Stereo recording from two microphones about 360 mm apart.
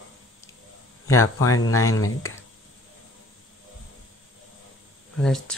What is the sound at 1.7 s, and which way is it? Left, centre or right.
Speech, left.